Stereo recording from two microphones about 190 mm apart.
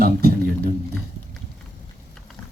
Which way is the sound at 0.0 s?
55° right (ahead or behind).